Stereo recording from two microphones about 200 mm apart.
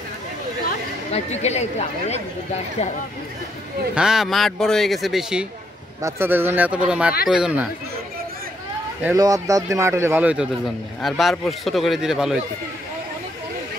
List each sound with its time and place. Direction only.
1.1 s speech: 35° left (ahead or behind)
3.9 s speech: 5° right (ahead or behind)
9.0 s speech: 15° right (ahead or behind)